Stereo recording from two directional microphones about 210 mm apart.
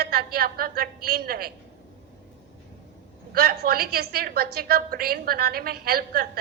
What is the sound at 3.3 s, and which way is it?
A woman's voice, 45° right (ahead or behind).